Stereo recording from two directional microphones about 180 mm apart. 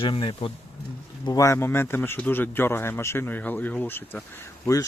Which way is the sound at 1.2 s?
20° left (ahead or behind).